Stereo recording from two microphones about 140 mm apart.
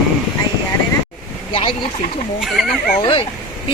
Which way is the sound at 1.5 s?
40° left (ahead or behind).